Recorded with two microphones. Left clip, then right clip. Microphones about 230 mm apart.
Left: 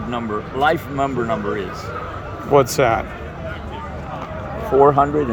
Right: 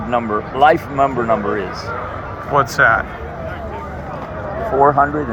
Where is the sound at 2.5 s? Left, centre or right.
Left.